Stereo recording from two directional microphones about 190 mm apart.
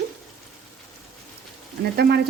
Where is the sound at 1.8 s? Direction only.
60° right (ahead or behind).